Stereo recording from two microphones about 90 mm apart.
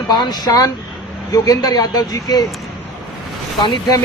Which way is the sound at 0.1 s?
50° left (ahead or behind).